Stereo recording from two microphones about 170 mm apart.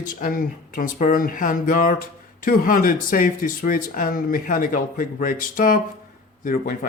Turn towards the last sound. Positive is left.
turn(degrees=55)  # may be behind; listen again after turning